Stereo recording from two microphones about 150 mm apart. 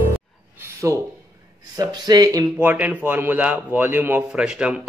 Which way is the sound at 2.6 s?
10° right (ahead or behind).